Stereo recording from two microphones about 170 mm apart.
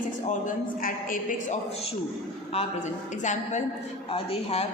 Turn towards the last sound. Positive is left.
turn(degrees=35)  # may be behind; listen again after turning